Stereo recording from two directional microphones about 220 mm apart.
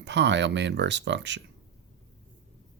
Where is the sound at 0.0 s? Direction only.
55° right (ahead or behind).